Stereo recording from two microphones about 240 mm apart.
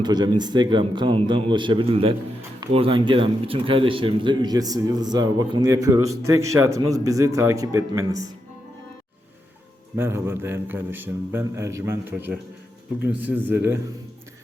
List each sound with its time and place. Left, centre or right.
0.0 s a man's voice: centre
9.9 s a man's voice: centre